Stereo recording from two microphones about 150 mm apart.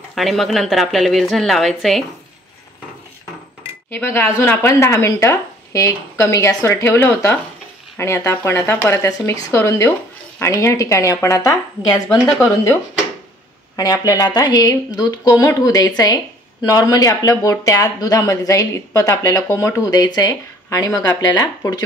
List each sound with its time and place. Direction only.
0.1 s a woman's voice: centre (ahead or behind)
3.9 s speech: 15° left (ahead or behind)
13.7 s speech: 20° left (ahead or behind)